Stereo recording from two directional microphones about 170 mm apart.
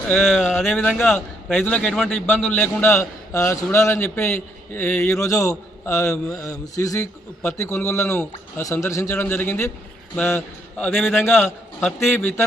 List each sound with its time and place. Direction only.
0.1 s a man's voice: centre (ahead or behind)